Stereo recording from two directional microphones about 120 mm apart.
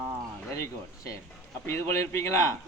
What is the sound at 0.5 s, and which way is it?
Speech, 25° left (ahead or behind).